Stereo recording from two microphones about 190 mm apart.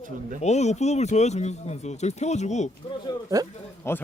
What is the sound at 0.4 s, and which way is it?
Speech, 35° left (ahead or behind).